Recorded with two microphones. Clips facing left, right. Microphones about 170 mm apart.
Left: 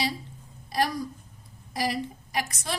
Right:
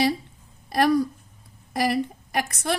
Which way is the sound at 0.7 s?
60° right (ahead or behind).